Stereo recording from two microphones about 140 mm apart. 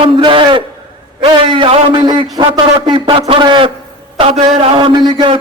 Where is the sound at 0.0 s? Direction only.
35° right (ahead or behind).